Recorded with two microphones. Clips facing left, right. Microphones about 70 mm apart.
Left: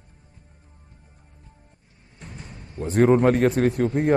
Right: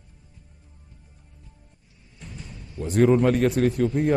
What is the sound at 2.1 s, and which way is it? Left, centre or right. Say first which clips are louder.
A man's voice: left 1 dB; left.